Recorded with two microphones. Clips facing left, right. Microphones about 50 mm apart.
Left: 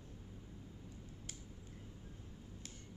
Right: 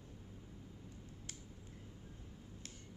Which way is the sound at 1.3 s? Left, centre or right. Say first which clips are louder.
Right 1 dB; right.